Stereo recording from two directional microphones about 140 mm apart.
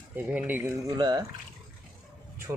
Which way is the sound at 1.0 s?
30° right (ahead or behind).